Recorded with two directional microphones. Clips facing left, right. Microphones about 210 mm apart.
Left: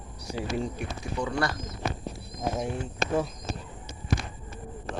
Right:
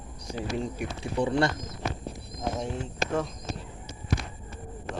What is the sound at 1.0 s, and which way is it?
Speech, 30° right (ahead or behind).